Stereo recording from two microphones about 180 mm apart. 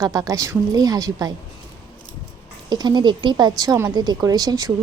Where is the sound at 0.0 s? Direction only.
20° right (ahead or behind).